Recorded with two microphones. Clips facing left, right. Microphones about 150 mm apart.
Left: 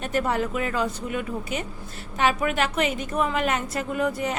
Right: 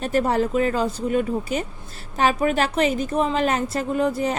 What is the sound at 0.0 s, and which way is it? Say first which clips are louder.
A woman's voice: right 4 dB; 35° right (ahead or behind).